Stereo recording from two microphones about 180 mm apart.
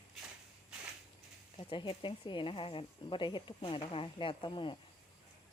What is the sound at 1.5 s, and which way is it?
Speech, 30° left (ahead or behind).